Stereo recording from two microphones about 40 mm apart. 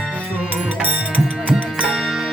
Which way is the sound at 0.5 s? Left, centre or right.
Right.